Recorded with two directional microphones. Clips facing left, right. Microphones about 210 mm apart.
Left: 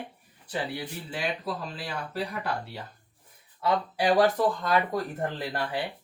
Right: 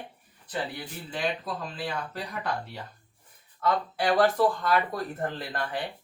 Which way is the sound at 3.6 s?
10° left (ahead or behind).